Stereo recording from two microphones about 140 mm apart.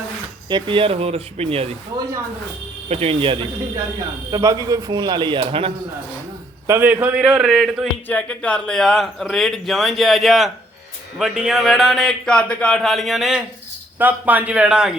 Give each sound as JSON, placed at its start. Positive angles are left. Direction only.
{"t": 0.4, "sound": "speech", "side_deg": -35}
{"t": 2.9, "sound": "speech", "side_deg": -45}
{"t": 4.3, "sound": "speech", "side_deg": -25}
{"t": 6.7, "sound": "speech", "side_deg": -15}
{"t": 8.0, "sound": "a man's voice", "side_deg": 10}